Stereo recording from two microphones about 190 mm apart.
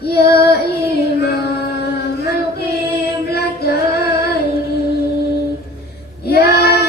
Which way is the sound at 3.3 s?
55° left (ahead or behind).